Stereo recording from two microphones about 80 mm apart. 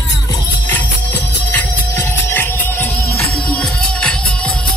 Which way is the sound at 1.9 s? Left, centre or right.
Left.